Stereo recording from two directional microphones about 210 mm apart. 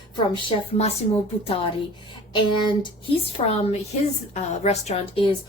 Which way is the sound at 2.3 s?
20° left (ahead or behind).